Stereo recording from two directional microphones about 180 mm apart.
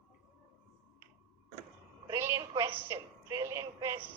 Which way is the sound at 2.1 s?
15° right (ahead or behind).